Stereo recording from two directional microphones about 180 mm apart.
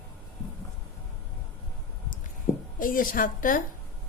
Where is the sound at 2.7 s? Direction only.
50° left (ahead or behind).